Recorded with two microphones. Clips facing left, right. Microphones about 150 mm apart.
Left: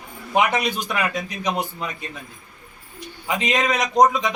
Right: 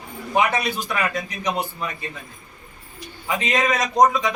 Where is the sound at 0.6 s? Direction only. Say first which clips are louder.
Left 1 dB; 15° left (ahead or behind).